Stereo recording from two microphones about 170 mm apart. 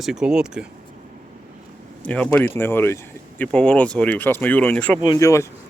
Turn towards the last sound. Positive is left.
turn(degrees=20)  # may be behind; listen again after turning